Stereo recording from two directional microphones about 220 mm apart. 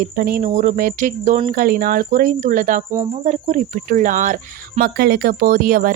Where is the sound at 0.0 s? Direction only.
40° right (ahead or behind).